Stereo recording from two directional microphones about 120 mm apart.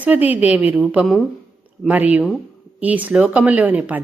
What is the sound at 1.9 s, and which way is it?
Speech, 15° right (ahead or behind).